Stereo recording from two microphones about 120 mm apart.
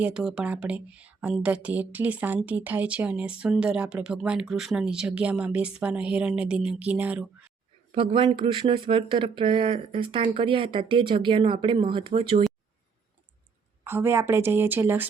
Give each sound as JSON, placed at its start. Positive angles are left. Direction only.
{"t": 0.0, "sound": "speech", "side_deg": -5}
{"t": 7.9, "sound": "speech", "side_deg": -45}
{"t": 13.8, "sound": "a woman's voice", "side_deg": -20}